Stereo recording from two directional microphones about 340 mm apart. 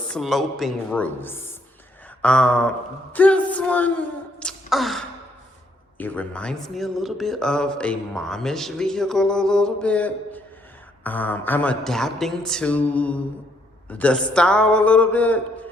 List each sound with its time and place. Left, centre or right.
0.1 s speech: centre